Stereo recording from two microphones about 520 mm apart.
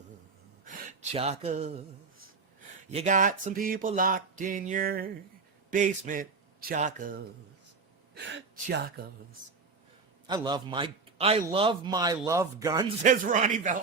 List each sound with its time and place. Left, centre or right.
0.6 s gasp: centre
2.9 s a man's voice: centre
8.1 s a woman's voice: centre
10.2 s a man's voice: centre